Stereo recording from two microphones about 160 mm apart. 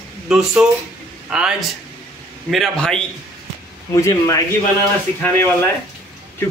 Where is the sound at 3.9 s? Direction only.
20° left (ahead or behind).